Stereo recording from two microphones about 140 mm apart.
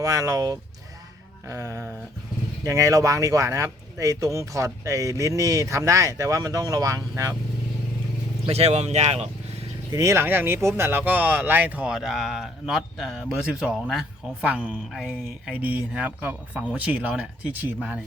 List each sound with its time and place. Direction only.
0.0 s speech: 25° right (ahead or behind)
8.4 s speech: 50° right (ahead or behind)
9.9 s speech: 20° right (ahead or behind)